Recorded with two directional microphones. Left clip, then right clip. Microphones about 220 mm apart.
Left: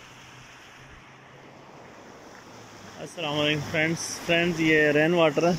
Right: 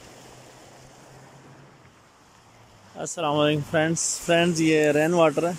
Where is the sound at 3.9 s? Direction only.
60° right (ahead or behind).